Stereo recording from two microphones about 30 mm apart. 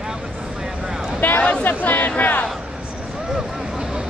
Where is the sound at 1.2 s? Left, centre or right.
Left.